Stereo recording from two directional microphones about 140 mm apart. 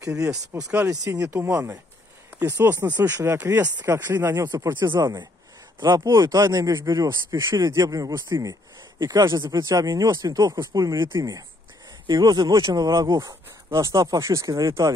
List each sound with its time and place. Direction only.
0.0 s speech: 25° right (ahead or behind)
3.3 s speech: 15° right (ahead or behind)